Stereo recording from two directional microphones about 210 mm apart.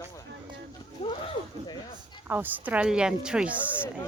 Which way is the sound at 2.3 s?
10° right (ahead or behind).